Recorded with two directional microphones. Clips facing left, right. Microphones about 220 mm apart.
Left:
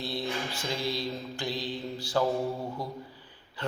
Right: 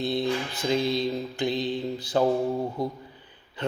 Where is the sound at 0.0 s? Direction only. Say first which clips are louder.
Right 7 dB; 20° right (ahead or behind).